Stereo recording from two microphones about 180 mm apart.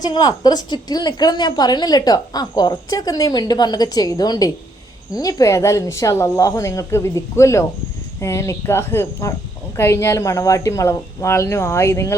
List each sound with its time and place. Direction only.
0.0 s a woman's voice: 20° left (ahead or behind)